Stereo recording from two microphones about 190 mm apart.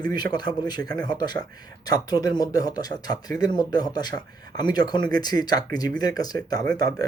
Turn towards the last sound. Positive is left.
turn(degrees=20)  # may be behind; listen again after turning